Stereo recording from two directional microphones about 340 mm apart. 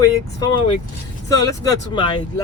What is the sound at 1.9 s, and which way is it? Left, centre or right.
Speech, centre.